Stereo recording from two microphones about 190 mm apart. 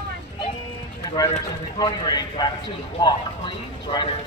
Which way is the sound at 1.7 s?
20° left (ahead or behind).